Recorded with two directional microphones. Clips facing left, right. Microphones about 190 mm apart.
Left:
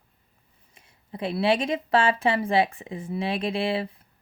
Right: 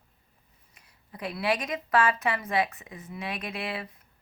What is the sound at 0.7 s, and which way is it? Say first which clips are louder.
Speech: left 8 dB; 25° left (ahead or behind).